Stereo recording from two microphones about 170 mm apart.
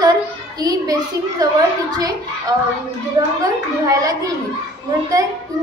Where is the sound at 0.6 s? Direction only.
20° right (ahead or behind).